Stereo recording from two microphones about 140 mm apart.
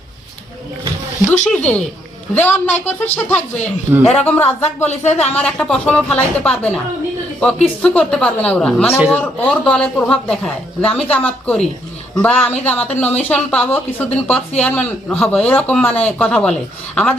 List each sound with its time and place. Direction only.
1.5 s speech: 10° left (ahead or behind)
4.9 s speech: 55° left (ahead or behind)
5.3 s speech: 5° left (ahead or behind)